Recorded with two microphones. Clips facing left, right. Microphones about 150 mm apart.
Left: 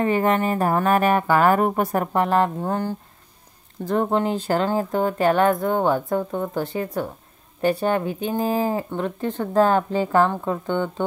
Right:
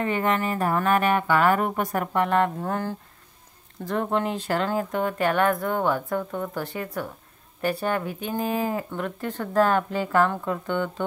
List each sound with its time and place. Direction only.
0.0 s speech: 35° left (ahead or behind)
3.8 s speech: 35° left (ahead or behind)